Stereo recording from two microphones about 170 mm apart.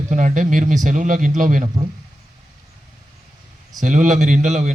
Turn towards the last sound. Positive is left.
turn(degrees=-45)  # may be behind; listen again after turning